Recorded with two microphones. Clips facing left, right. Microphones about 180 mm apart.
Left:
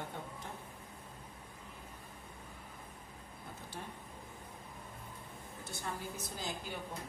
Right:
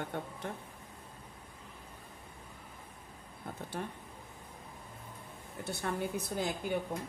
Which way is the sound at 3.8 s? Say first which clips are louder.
Right 7 dB; 65° right (ahead or behind).